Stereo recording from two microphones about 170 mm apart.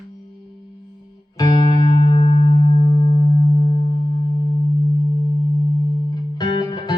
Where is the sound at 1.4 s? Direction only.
25° left (ahead or behind).